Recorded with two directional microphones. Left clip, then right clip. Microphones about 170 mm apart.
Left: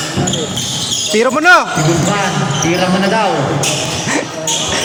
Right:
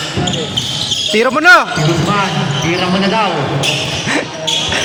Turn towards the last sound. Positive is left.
turn(degrees=55)  # may be behind; listen again after turning